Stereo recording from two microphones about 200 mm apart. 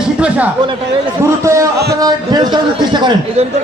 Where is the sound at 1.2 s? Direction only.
15° right (ahead or behind).